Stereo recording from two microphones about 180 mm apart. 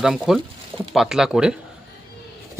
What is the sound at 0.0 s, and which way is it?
Speech, centre (ahead or behind).